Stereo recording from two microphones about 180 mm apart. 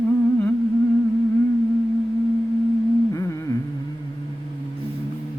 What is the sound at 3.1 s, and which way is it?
Humming, 20° left (ahead or behind).